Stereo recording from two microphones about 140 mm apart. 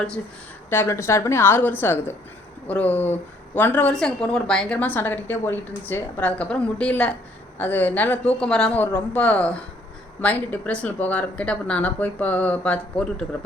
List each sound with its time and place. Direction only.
0.7 s speech: 20° left (ahead or behind)